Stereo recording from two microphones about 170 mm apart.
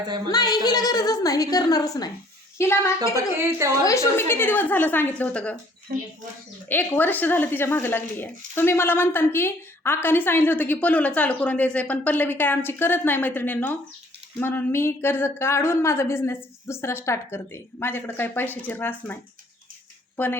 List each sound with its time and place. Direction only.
0.3 s a woman's voice: 25° left (ahead or behind)
3.3 s a woman's voice: 15° right (ahead or behind)
3.8 s a woman's voice: 15° left (ahead or behind)
5.9 s speech: 55° right (ahead or behind)
6.7 s a woman's voice: 10° left (ahead or behind)
20.1 s speech: 10° left (ahead or behind)